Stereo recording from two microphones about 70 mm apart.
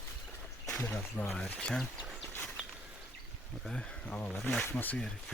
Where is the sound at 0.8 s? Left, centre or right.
Left.